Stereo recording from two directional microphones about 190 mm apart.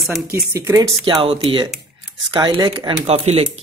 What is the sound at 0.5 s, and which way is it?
Speech, 15° right (ahead or behind).